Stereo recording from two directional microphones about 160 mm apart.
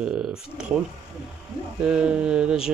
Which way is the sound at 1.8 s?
5° right (ahead or behind).